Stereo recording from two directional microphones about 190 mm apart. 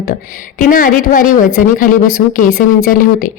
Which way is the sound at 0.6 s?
45° left (ahead or behind).